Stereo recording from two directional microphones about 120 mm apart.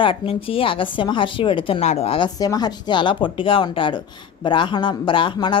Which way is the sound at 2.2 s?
35° left (ahead or behind).